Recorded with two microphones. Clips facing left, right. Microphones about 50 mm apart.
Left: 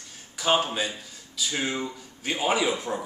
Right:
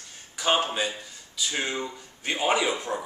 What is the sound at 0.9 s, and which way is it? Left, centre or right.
Speech, centre.